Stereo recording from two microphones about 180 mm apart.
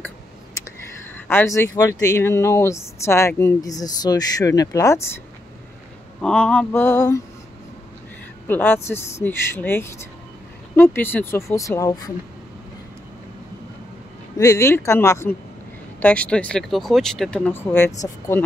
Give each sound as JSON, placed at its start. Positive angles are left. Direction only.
{"t": 1.1, "sound": "speech", "side_deg": 10}
{"t": 6.2, "sound": "speech", "side_deg": 5}
{"t": 8.5, "sound": "speech", "side_deg": 10}
{"t": 14.4, "sound": "speech", "side_deg": 15}